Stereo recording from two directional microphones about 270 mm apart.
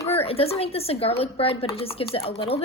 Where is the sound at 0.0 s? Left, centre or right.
Left.